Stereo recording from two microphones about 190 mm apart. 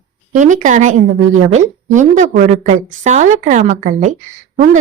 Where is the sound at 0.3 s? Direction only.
40° right (ahead or behind).